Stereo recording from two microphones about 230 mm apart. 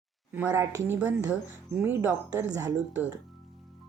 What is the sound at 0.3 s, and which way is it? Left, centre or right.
A woman's voice, centre.